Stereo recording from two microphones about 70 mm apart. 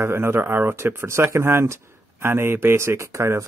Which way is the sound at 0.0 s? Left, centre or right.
Right.